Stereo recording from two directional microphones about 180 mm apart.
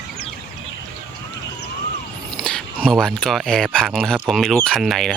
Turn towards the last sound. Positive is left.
turn(degrees=0)  # may be behind; listen again after turning